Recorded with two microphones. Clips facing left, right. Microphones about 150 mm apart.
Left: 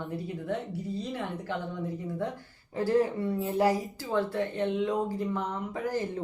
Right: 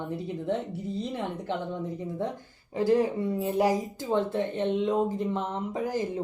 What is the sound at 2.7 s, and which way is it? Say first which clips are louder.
A woman's voice: right 2 dB; 15° right (ahead or behind).